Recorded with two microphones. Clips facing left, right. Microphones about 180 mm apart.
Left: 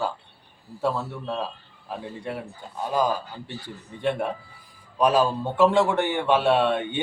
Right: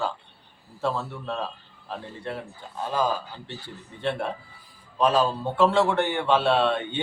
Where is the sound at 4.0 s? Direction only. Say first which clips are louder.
Left 2 dB; 10° left (ahead or behind).